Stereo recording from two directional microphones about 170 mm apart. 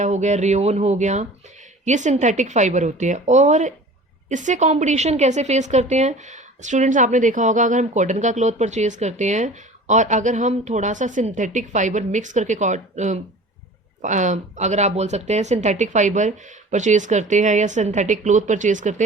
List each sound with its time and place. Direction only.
0.0 s a woman's voice: 45° right (ahead or behind)